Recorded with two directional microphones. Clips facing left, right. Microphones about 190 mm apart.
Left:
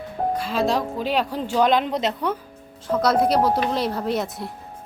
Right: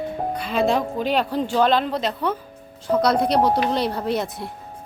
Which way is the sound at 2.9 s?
Centre (ahead or behind).